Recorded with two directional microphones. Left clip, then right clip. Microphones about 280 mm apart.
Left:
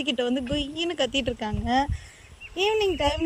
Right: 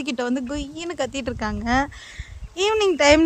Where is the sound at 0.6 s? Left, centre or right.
Right.